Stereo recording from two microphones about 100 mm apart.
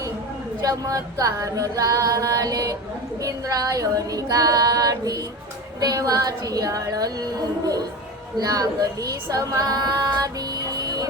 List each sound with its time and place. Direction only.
0.6 s singing: 35° right (ahead or behind)
10.7 s music: 40° right (ahead or behind)